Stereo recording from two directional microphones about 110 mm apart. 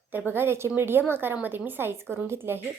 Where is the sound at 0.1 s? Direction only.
20° right (ahead or behind).